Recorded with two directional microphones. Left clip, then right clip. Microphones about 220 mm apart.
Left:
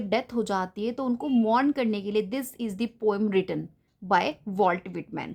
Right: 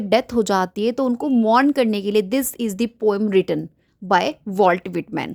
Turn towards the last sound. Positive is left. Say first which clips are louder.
# right 9 dB
turn(degrees=-35)  # may be behind; listen again after turning